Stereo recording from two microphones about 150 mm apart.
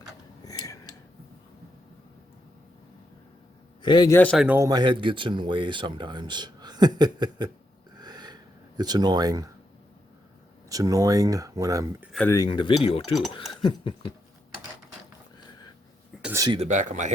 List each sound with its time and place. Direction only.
0.4 s a sound: 25° left (ahead or behind)
3.8 s a man's voice: 30° left (ahead or behind)
4.1 s a man's voice: 10° left (ahead or behind)
4.4 s a man's voice: 10° right (ahead or behind)
4.6 s speech: 30° right (ahead or behind)
7.9 s gasp: 30° right (ahead or behind)
8.8 s speech: 25° right (ahead or behind)
10.7 s speech: 25° right (ahead or behind)
12.3 s speech: 25° left (ahead or behind)
16.2 s a sound: 20° right (ahead or behind)
16.6 s speech: 55° right (ahead or behind)